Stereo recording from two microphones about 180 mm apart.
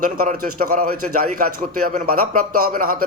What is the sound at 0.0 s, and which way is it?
A man's voice, 50° right (ahead or behind).